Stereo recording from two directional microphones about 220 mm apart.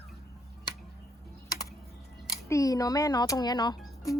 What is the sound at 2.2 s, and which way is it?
Speech, 15° left (ahead or behind).